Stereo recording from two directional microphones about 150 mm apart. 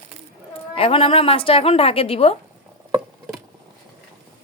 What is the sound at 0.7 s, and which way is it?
Speech, 40° left (ahead or behind).